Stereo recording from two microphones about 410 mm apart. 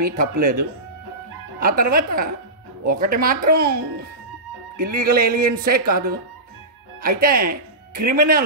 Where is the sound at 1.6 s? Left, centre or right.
Right.